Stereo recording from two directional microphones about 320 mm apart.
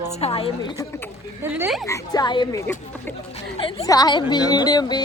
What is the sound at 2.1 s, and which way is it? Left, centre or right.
Speech, centre.